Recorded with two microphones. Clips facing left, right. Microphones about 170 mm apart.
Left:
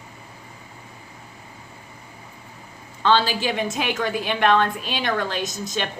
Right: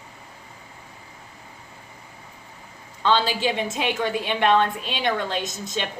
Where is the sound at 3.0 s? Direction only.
25° right (ahead or behind).